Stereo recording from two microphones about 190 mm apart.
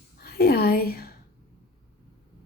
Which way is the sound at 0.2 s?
55° left (ahead or behind).